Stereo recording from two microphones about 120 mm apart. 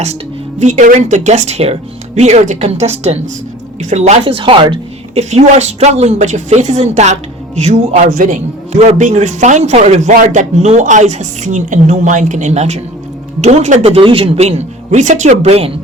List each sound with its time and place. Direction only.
0.6 s a woman's voice: 90° right; by 3.2 s 60° right (ahead or behind)
3.8 s a woman's voice: 75° right (ahead or behind)
4.3 s speech: 45° right (ahead or behind)
5.1 s a woman's voice: 65° right (ahead or behind)